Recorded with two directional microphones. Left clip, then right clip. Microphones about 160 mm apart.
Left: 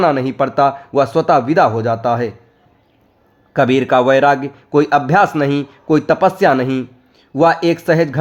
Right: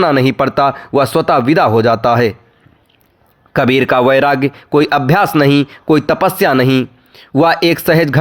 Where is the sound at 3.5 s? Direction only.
35° right (ahead or behind).